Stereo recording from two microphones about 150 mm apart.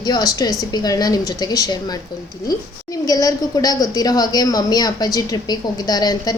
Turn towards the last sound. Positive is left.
turn(degrees=25)  # may be behind; listen again after turning